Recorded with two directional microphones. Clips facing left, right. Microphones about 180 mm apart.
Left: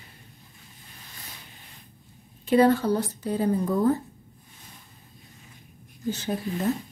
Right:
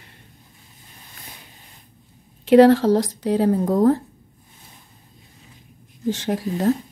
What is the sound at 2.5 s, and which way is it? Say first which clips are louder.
A woman's voice: right 8 dB; 85° right.